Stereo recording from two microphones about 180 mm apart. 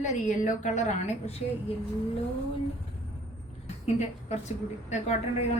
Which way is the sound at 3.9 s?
40° left (ahead or behind).